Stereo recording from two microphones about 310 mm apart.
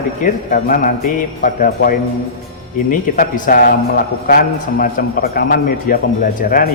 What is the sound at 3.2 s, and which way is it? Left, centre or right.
A man's voice, left.